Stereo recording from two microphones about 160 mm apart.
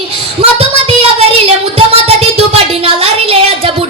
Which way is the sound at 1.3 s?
35° right (ahead or behind).